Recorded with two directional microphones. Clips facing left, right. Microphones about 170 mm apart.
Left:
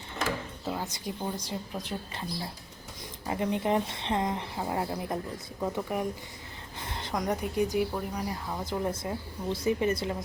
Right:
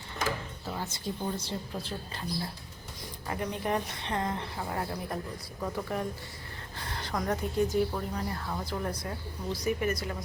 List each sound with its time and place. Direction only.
0.6 s speech: 15° left (ahead or behind)
3.2 s speech: 20° left (ahead or behind)